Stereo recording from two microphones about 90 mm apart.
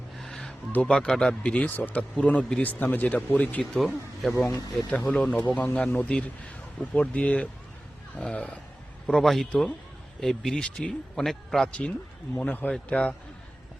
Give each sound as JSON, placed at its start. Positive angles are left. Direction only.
{"t": 0.2, "sound": "a sound", "side_deg": 5}
{"t": 0.7, "sound": "speech", "side_deg": 10}
{"t": 3.6, "sound": "speech", "side_deg": 5}
{"t": 5.1, "sound": "speech", "side_deg": 10}